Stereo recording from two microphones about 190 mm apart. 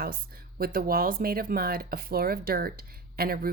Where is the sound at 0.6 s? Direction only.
50° right (ahead or behind).